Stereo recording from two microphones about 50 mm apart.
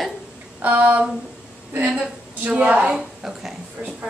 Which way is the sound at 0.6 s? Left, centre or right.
Right.